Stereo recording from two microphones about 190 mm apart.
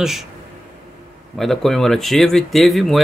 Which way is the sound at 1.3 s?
Centre (ahead or behind).